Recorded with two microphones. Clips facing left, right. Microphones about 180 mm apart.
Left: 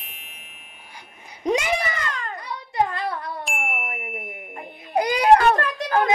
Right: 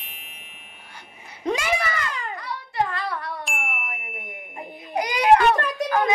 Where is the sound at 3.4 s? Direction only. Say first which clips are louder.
Left 3 dB; centre (ahead or behind).